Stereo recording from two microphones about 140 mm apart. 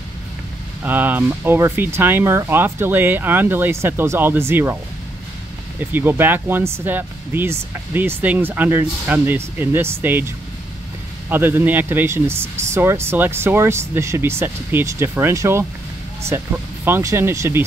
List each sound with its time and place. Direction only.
0.8 s speech: 15° right (ahead or behind)
5.9 s speech: 15° right (ahead or behind)